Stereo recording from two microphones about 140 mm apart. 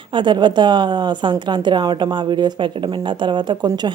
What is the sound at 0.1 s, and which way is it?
A woman's voice, 35° right (ahead or behind).